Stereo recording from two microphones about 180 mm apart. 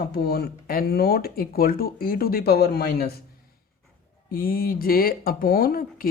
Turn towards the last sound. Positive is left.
turn(degrees=55)  # may be behind; listen again after turning